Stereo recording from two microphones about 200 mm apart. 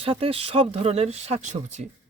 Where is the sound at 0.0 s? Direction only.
30° right (ahead or behind).